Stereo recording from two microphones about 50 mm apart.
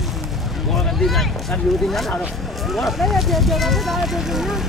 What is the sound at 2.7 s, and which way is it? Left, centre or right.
Speech, centre.